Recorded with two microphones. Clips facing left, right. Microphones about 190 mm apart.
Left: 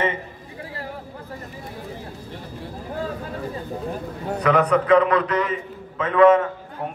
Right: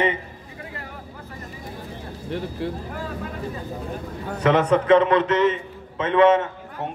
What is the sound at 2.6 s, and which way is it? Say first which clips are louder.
Speech: right 11 dB; 70° right (ahead or behind).